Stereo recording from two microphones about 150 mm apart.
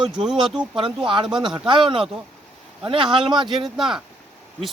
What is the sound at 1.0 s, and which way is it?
Speech, 30° right (ahead or behind).